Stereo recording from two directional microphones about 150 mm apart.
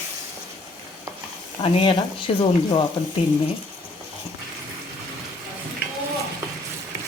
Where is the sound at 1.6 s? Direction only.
35° left (ahead or behind).